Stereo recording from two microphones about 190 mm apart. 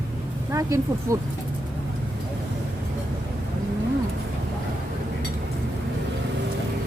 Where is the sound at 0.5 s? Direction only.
15° right (ahead or behind).